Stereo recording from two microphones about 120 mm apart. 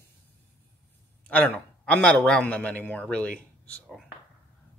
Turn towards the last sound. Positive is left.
turn(degrees=5)  # may be behind; listen again after turning